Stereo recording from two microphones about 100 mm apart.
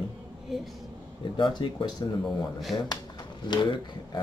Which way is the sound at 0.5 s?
Centre (ahead or behind).